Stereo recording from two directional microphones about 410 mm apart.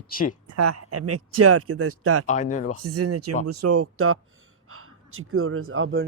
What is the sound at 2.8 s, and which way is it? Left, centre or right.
Speech, right.